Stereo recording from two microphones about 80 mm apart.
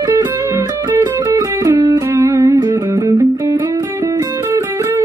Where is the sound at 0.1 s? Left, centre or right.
Right.